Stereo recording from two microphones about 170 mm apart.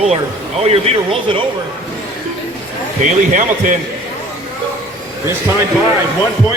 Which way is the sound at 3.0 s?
50° right (ahead or behind).